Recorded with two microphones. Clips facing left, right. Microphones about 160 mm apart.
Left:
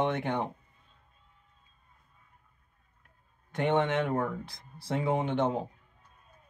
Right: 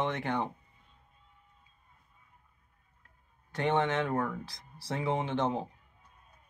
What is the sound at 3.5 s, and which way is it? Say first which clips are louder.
Speech: left 2 dB; 15° left (ahead or behind).